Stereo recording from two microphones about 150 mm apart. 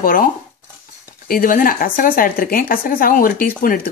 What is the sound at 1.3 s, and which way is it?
Speech, 70° left (ahead or behind).